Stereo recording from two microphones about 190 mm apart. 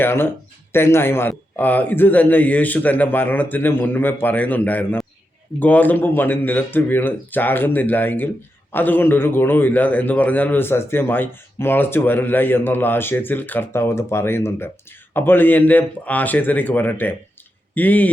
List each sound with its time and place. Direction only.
0.0 s a man's voice: 10° left (ahead or behind)